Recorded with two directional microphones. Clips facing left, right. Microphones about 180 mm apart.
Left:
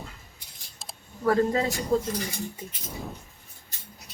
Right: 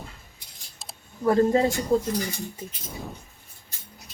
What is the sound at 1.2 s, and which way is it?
Speech, 25° right (ahead or behind).